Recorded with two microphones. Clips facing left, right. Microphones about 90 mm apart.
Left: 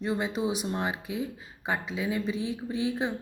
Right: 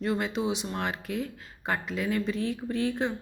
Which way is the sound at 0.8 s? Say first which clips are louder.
Even; 10° left (ahead or behind).